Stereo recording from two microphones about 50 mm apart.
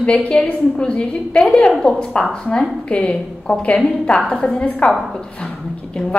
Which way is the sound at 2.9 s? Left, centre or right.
Left.